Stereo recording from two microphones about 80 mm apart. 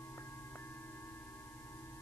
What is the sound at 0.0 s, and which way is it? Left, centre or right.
Singing bowl, left.